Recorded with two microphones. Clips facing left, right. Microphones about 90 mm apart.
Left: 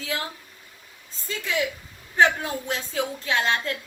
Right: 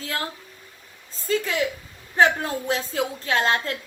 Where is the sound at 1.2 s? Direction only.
40° right (ahead or behind).